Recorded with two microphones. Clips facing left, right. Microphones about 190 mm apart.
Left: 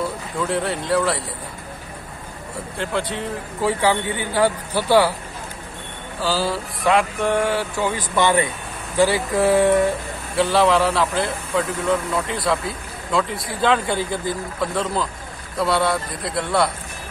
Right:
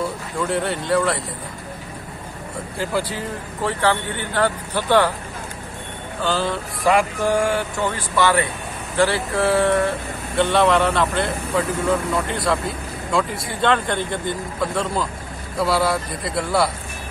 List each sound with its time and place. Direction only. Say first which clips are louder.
0.0 s speech: even; centre (ahead or behind)
2.8 s speech: right 1 dB; centre (ahead or behind)
3.6 s speech: left 2 dB; 10° left (ahead or behind)
6.2 s speech: even; 5° left (ahead or behind)
8.2 s speech: even; 20° left (ahead or behind)
10.3 s speech: even; centre (ahead or behind)